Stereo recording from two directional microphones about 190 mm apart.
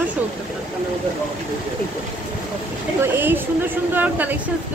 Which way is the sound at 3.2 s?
10° right (ahead or behind).